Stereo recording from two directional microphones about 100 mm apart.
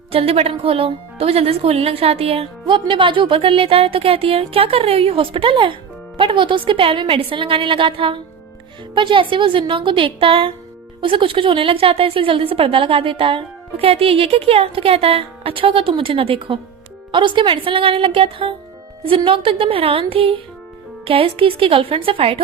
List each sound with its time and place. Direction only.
0.1 s a woman's voice: 80° right
2.6 s a woman's voice: 55° right (ahead or behind)
17.1 s a woman's voice: 55° right (ahead or behind)